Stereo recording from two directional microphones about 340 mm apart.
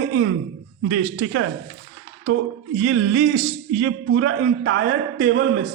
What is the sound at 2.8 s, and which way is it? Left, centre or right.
A man's voice, right.